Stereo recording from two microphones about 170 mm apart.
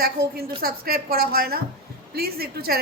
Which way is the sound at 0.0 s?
65° right (ahead or behind).